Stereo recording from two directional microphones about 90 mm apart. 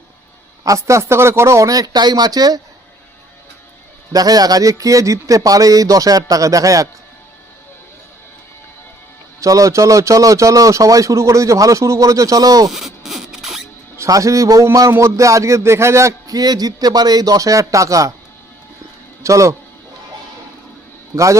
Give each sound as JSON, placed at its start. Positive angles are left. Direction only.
{"t": 0.6, "sound": "speech", "side_deg": -35}
{"t": 4.1, "sound": "speech", "side_deg": -45}
{"t": 9.4, "sound": "speech", "side_deg": -40}
{"t": 12.7, "sound": "rodents", "side_deg": 0}
{"t": 13.9, "sound": "speech", "side_deg": -35}
{"t": 19.2, "sound": "speech", "side_deg": -35}